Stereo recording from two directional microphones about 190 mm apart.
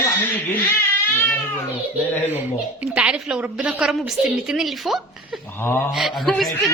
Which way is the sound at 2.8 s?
5° right (ahead or behind).